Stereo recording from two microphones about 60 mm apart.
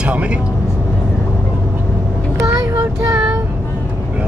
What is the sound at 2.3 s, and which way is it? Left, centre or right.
Child singing, right.